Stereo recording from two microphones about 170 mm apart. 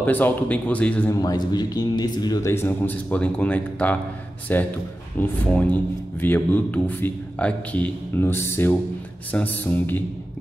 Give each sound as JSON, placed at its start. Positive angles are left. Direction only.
{"t": 0.0, "sound": "a man's voice", "side_deg": 10}
{"t": 1.1, "sound": "a man's voice", "side_deg": 20}